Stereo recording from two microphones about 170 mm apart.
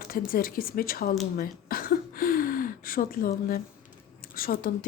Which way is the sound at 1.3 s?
60° left (ahead or behind).